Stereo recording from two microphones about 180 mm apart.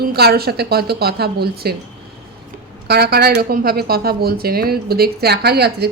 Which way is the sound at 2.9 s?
60° right (ahead or behind).